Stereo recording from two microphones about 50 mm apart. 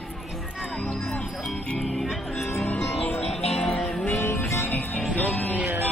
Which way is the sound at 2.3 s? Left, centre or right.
Left.